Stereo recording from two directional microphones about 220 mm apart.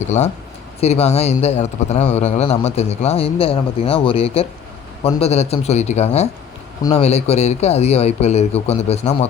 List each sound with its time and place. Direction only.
0.0 s a man's voice: 30° left (ahead or behind)